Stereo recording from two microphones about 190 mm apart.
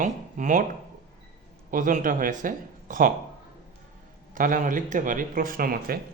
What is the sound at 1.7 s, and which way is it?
Speech, 45° right (ahead or behind).